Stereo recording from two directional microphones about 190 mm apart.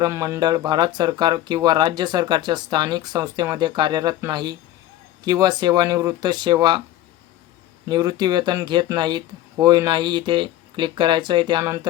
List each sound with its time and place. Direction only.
0.0 s speech: 15° right (ahead or behind)
7.9 s speech: 20° right (ahead or behind)